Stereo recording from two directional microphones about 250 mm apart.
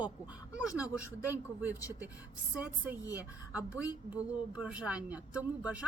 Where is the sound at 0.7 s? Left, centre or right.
Centre.